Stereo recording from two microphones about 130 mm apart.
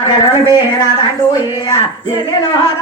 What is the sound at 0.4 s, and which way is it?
Speech, 30° left (ahead or behind).